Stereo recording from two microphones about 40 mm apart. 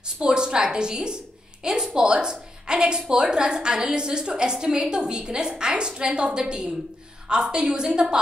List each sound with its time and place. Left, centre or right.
0.2 s a woman's voice: right